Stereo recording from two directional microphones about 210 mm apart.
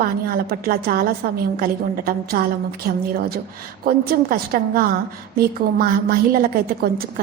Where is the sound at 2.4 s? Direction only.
45° right (ahead or behind).